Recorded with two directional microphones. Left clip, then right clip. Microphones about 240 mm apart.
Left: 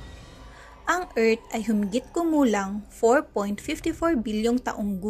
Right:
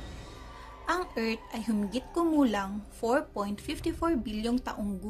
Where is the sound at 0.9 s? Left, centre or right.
Centre.